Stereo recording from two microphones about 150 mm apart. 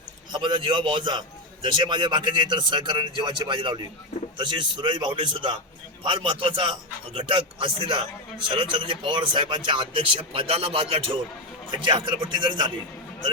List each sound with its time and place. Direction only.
0.3 s speech: 30° right (ahead or behind)